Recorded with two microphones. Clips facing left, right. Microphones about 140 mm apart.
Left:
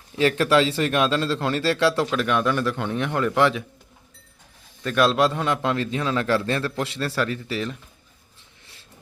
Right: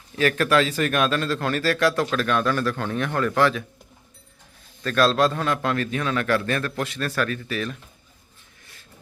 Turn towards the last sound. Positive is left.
turn(degrees=20)  # may be behind; listen again after turning